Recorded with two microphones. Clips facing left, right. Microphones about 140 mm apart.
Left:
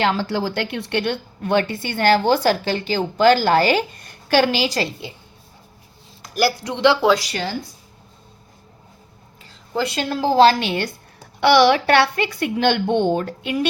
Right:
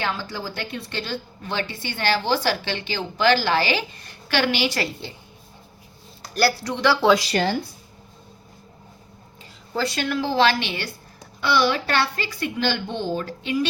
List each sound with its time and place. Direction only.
0.0 s a woman's voice: 75° left (ahead or behind); by 4.8 s 40° left (ahead or behind)
4.8 s a woman's voice: 15° left (ahead or behind)
6.3 s speech: 15° left (ahead or behind)
9.7 s speech: 25° left (ahead or behind)
10.2 s a woman's voice: 40° left (ahead or behind)
11.3 s a woman's voice: 75° left (ahead or behind); by 13.7 s 55° left (ahead or behind)